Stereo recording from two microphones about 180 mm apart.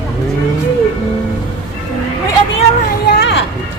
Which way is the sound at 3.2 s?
75° left (ahead or behind).